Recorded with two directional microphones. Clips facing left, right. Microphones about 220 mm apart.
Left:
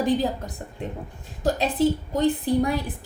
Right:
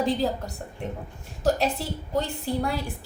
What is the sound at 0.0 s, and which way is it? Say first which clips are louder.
A woman's voice: left 2 dB; 20° left (ahead or behind).